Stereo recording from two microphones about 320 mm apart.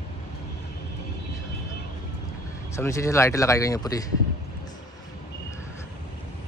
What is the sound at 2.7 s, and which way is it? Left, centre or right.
Speech, centre.